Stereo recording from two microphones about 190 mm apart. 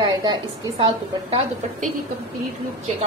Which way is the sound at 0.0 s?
25° right (ahead or behind).